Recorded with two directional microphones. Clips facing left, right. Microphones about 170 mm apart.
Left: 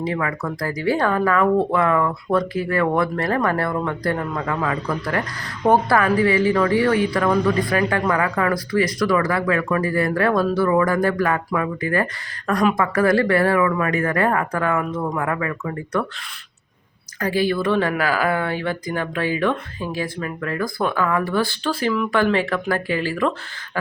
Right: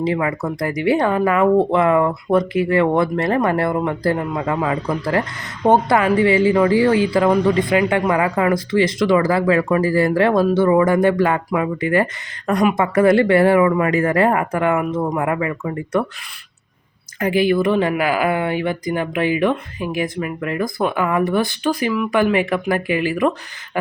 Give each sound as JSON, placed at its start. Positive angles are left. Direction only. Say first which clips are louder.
{"t": 0.0, "sound": "speech", "louder": "right 4 dB", "side_deg": -25}
{"t": 17.2, "sound": "speech", "louder": "right 4 dB", "side_deg": -20}